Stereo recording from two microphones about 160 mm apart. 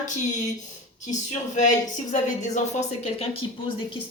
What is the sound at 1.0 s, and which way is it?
A woman's voice, 50° left (ahead or behind).